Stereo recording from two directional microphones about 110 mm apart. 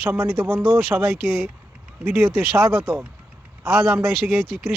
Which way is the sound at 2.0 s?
20° right (ahead or behind).